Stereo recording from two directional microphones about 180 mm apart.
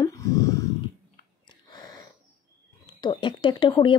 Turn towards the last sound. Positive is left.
turn(degrees=30)  # may be behind; listen again after turning